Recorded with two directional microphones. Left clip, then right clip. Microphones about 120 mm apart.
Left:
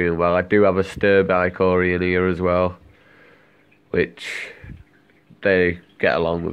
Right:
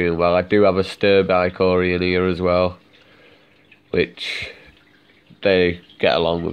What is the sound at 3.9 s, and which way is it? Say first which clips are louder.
Speech: right 1 dB; 15° right (ahead or behind).